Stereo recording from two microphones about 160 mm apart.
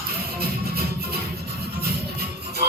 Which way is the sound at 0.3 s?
75° right (ahead or behind).